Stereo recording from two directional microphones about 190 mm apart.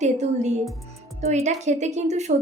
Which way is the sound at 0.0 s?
40° right (ahead or behind).